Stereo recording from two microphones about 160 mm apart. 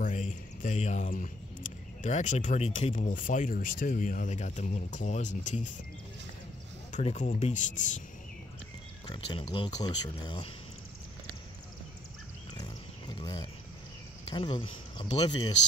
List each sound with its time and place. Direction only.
0.0 s speech: 55° left (ahead or behind)
6.9 s speech: 45° left (ahead or behind)
9.0 s speech: 30° left (ahead or behind)
13.2 s speech: 25° left (ahead or behind)